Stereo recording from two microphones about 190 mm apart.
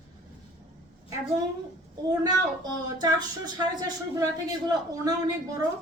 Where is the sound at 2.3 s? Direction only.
20° right (ahead or behind).